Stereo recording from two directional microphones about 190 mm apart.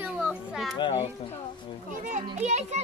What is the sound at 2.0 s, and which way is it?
Speech, 40° right (ahead or behind).